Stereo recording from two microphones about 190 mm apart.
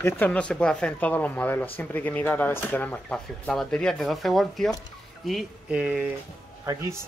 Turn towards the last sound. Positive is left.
turn(degrees=-15)  # may be behind; listen again after turning